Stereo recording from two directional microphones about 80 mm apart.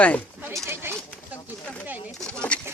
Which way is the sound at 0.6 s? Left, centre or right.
Right.